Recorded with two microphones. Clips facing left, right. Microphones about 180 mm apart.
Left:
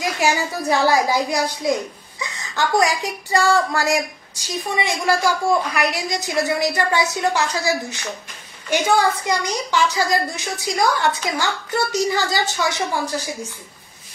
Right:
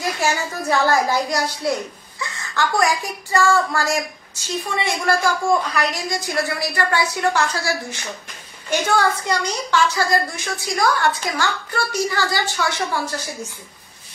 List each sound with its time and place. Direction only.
0.0 s a woman's voice: 15° left (ahead or behind)